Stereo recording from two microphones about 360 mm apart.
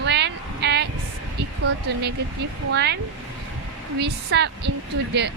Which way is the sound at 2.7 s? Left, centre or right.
Right.